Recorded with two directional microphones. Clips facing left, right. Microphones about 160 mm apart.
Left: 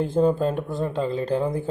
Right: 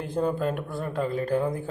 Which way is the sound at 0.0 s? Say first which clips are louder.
Left 6 dB; 30° left (ahead or behind).